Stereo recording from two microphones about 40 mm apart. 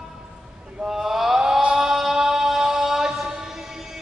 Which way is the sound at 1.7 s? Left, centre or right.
Centre.